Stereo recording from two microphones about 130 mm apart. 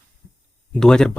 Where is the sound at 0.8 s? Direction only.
5° left (ahead or behind).